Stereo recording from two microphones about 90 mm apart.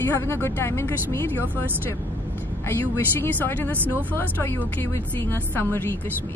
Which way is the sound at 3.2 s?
20° left (ahead or behind).